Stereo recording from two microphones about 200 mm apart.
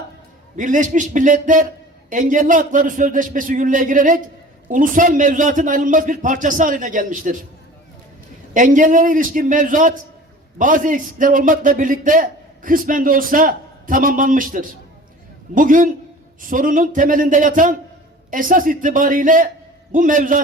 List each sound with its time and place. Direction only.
0.5 s a man's voice: 40° right (ahead or behind)
8.5 s a man's voice: 40° right (ahead or behind)